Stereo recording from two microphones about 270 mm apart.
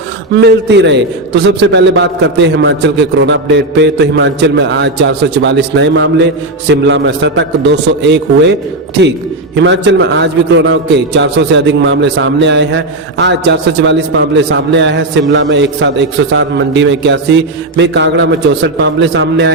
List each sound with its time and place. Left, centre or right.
0.3 s a man's voice: right
9.6 s a man's voice: right